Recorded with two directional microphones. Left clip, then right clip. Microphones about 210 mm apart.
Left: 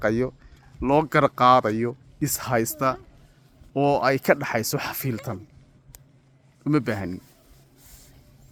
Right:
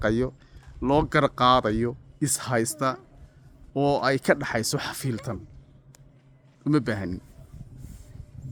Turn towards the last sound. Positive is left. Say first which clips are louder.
# left 1 dB
turn(degrees=0)  # may be behind; listen again after turning